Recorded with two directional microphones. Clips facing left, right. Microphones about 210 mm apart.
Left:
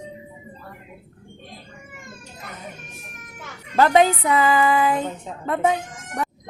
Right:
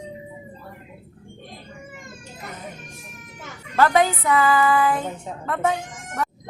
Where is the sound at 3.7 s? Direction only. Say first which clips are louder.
Left 2 dB; 20° left (ahead or behind).